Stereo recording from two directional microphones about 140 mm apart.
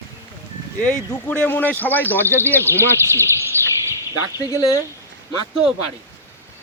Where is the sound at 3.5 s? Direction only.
15° left (ahead or behind).